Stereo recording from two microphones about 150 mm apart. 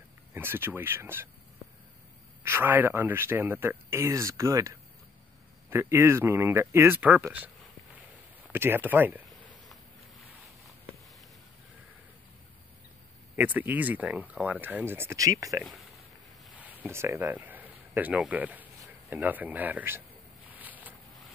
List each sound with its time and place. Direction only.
0.3 s speech: 15° right (ahead or behind)
2.4 s speech: 15° right (ahead or behind)
13.4 s speech: 10° right (ahead or behind)
16.6 s speech: 15° right (ahead or behind)
20.5 s a sound: 10° right (ahead or behind)